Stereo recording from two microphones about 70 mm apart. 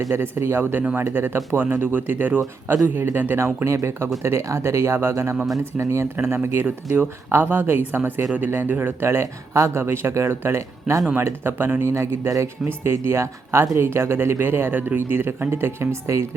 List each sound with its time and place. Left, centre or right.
0.1 s speech: right
11.1 s speech: right